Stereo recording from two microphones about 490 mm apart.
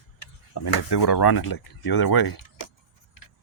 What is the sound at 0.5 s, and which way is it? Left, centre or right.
Speech, left.